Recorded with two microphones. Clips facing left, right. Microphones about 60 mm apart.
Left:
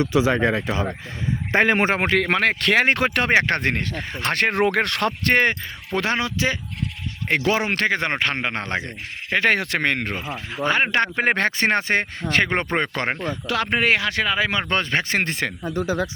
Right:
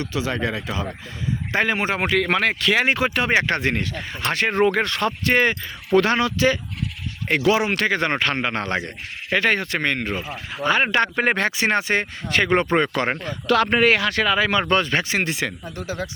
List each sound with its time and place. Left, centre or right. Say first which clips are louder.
0.0 s speech: left 6 dB; left
2.6 s speech: left 1 dB; left
5.4 s speech: even; left
6.0 s speech: right 3 dB; left
7.9 s speech: right 1 dB; left
9.5 s speech: left 1 dB; left
10.3 s speech: even; left
11.3 s speech: even; left
13.5 s speech: right 4 dB; centre
14.7 s speech: right 2 dB; left
15.1 s speech: even; left